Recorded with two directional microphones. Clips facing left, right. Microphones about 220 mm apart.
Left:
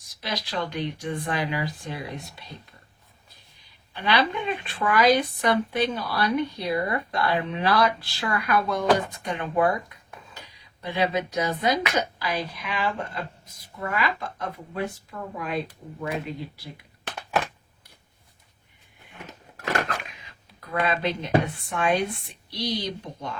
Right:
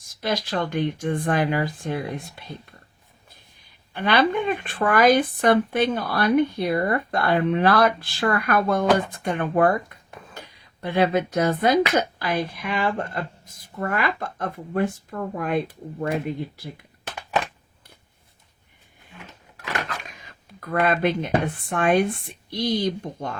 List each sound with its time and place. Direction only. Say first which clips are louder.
0.1 s speech: right 6 dB; 50° right (ahead or behind)
3.9 s speech: right 4 dB; 50° right (ahead or behind)
20.1 s a sound: right 4 dB; 45° right (ahead or behind)
21.4 s speech: right 4 dB; 50° right (ahead or behind)